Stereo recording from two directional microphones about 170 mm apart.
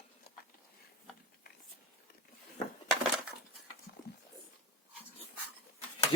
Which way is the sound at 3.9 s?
80° left.